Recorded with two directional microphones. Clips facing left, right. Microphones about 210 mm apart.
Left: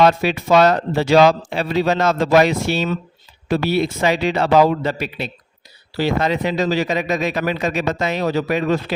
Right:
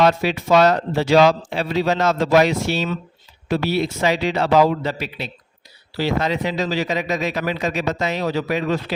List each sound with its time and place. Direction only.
0.0 s a man's voice: 55° left (ahead or behind)